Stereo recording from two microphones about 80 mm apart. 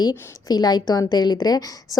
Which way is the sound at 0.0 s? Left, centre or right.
Left.